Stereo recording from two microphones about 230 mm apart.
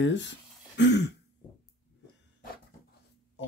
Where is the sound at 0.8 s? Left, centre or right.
Left.